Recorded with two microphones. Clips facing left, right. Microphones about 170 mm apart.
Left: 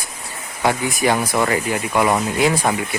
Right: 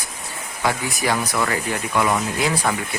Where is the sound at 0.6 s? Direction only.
25° left (ahead or behind).